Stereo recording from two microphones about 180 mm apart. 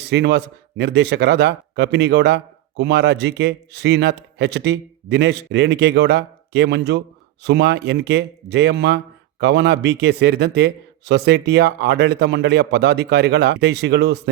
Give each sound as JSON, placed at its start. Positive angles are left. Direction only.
{"t": 0.0, "sound": "speech", "side_deg": -70}